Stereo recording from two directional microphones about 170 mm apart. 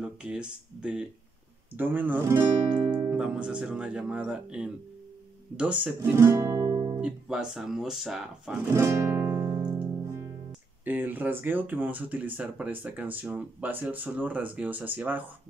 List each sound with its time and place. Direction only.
0.0 s speech: 5° right (ahead or behind); by 7.0 s 25° right (ahead or behind)
7.0 s speech: 5° right (ahead or behind)
8.7 s music: 15° right (ahead or behind)
10.8 s speech: 10° right (ahead or behind)